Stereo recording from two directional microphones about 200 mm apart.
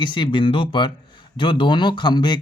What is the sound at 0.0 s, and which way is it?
Speech, 25° left (ahead or behind).